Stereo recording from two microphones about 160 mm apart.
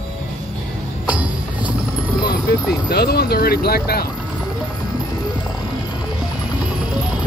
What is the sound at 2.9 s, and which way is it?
Speech, 90° left.